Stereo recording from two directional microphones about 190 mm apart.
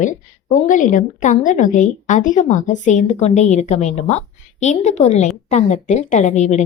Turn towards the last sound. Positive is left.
turn(degrees=40)  # may be behind; listen again after turning